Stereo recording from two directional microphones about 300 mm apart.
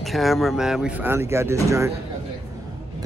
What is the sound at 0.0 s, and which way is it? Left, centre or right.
Speech, centre.